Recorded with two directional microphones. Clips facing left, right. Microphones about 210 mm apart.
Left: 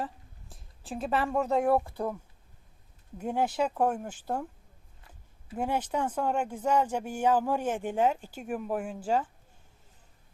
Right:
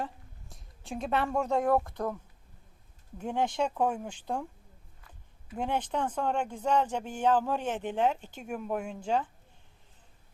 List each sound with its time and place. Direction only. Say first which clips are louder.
0.0 s a woman's voice: left 1 dB; centre (ahead or behind)
3.2 s speech: left 1 dB; 10° left (ahead or behind)
5.5 s speech: left 1 dB; 10° left (ahead or behind)